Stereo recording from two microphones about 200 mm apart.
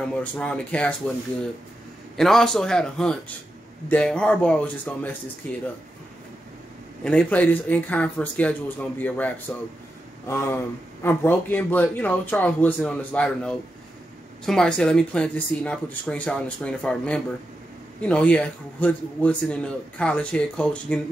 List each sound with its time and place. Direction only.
0.2 s speech: 5° left (ahead or behind)
2.1 s a man's voice: centre (ahead or behind)
7.1 s a man's voice: 5° left (ahead or behind)